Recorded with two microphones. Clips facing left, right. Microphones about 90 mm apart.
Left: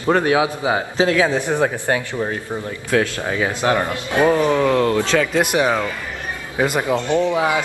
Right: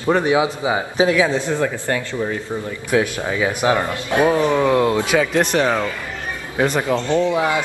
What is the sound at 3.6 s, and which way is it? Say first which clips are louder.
Speech: even; 15° right (ahead or behind).